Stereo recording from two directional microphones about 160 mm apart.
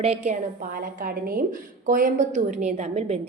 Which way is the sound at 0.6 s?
60° right (ahead or behind).